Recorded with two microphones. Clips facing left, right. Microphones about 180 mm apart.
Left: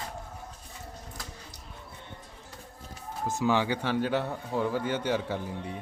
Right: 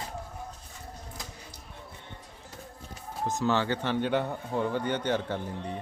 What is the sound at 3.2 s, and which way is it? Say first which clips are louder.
A man's voice: left 1 dB; 10° left (ahead or behind).